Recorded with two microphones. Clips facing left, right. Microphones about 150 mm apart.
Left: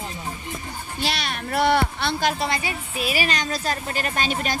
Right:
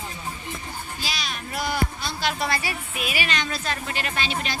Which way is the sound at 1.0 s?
60° left (ahead or behind).